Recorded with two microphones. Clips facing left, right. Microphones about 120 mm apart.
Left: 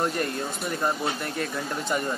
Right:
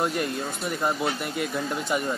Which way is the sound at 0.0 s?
Centre (ahead or behind).